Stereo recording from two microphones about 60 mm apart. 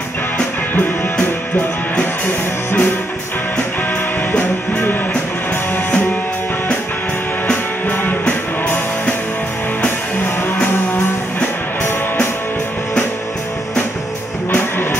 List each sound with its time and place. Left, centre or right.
2.2 s music: left
4.3 s music: left
7.9 s music: left
14.5 s music: left